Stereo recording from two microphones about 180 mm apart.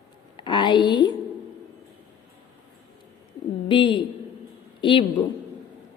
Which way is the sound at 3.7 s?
25° left (ahead or behind).